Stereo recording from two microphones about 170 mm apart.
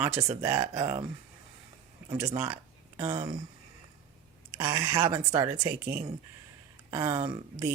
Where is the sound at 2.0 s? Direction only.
20° right (ahead or behind).